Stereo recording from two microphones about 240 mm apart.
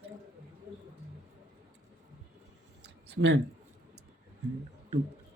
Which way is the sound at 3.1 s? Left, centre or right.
Right.